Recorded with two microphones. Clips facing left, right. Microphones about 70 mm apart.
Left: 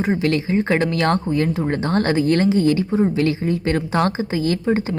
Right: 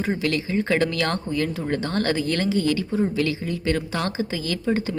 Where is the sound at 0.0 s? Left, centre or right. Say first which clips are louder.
Left 5 dB; left.